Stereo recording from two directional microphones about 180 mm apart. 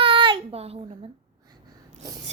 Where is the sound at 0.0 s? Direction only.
25° right (ahead or behind).